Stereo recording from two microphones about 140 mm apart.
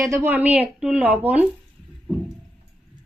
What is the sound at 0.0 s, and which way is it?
A woman's voice, 20° right (ahead or behind).